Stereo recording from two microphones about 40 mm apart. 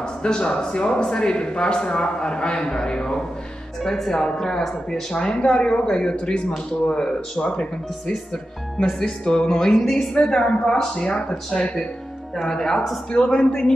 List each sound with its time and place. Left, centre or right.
0.2 s a man's voice: left
3.8 s speech: centre
5.2 s a man's voice: left
9.0 s a man's voice: left
12.4 s speech: centre
13.1 s a man's voice: left